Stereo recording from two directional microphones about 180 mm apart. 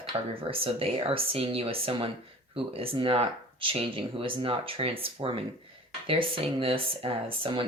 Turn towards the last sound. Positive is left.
turn(degrees=-30)  # may be behind; listen again after turning